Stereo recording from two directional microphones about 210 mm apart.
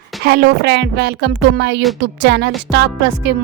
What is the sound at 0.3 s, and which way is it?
A woman's voice, 50° right (ahead or behind).